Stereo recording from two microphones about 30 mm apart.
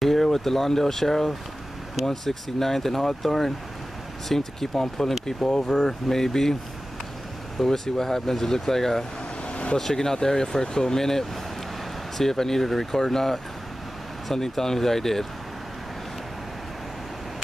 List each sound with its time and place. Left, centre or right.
0.0 s speech: centre
5.2 s speech: left
7.5 s speech: centre
9.5 s vehicle: left
9.8 s speech: centre